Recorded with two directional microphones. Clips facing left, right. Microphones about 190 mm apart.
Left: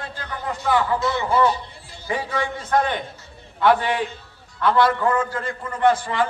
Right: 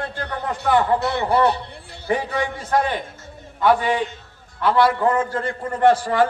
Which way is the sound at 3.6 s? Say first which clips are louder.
Right 1 dB; 5° right (ahead or behind).